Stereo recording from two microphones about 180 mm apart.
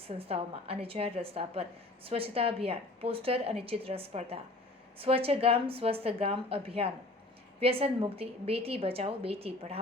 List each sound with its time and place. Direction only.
0.0 s a woman's voice: 35° right (ahead or behind)